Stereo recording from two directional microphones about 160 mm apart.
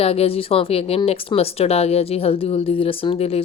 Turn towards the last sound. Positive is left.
turn(degrees=40)  # may be behind; listen again after turning